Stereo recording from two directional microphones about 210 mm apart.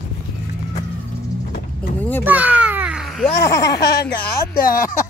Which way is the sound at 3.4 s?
15° left (ahead or behind).